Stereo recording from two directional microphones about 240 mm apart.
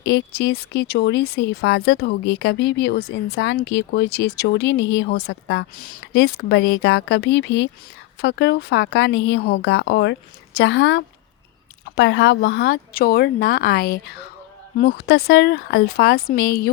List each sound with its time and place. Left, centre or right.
0.0 s speech: left